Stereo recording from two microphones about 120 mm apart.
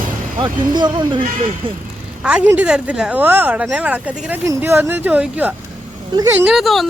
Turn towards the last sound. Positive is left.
turn(degrees=0)  # may be behind; listen again after turning